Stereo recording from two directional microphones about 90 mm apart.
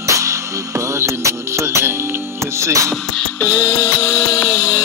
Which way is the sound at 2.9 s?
10° left (ahead or behind).